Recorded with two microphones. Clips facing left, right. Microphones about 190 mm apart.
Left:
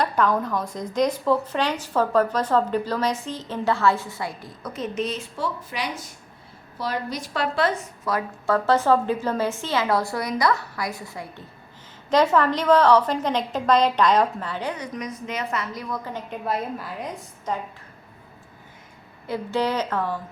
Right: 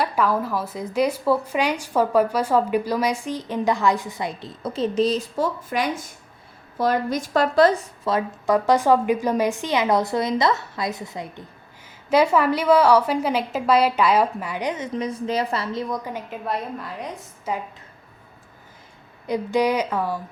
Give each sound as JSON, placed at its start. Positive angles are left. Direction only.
{"t": 0.0, "sound": "a woman's voice", "side_deg": -5}
{"t": 12.0, "sound": "a woman's voice", "side_deg": -10}
{"t": 16.0, "sound": "a woman's voice", "side_deg": -10}
{"t": 16.5, "sound": "a woman's voice", "side_deg": 0}
{"t": 19.3, "sound": "a woman's voice", "side_deg": -15}